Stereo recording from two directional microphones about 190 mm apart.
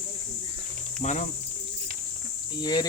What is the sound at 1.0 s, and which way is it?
Speech, 40° left (ahead or behind).